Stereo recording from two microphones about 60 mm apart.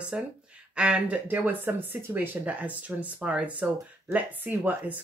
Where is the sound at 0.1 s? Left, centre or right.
Centre.